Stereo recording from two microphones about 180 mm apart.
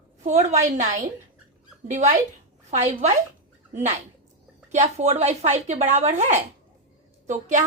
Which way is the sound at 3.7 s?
40° right (ahead or behind).